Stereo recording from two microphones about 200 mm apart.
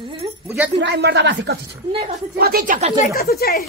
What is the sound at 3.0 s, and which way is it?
Speech, 50° left (ahead or behind).